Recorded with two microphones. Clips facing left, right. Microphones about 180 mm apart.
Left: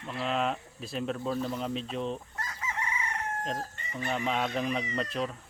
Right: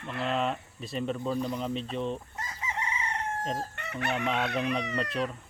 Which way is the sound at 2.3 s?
20° right (ahead or behind).